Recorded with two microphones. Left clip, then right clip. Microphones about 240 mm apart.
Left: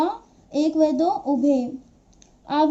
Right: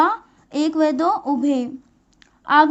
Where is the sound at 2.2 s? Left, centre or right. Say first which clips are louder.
Right 7 dB; right.